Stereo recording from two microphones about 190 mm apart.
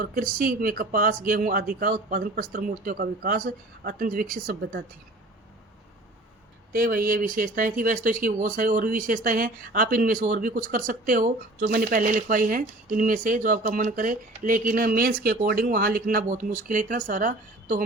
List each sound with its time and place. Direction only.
0.0 s speech: 45° right (ahead or behind)
6.7 s speech: 50° right (ahead or behind)